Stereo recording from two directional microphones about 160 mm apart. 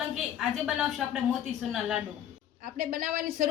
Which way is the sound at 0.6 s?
5° right (ahead or behind).